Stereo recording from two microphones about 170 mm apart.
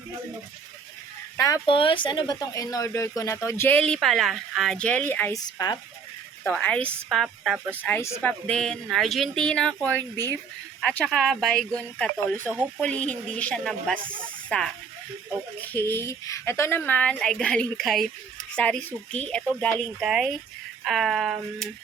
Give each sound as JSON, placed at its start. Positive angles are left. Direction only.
{"t": 1.4, "sound": "speech", "side_deg": 20}
{"t": 6.4, "sound": "speech", "side_deg": 5}
{"t": 7.8, "sound": "speech", "side_deg": 10}
{"t": 10.8, "sound": "speech", "side_deg": 5}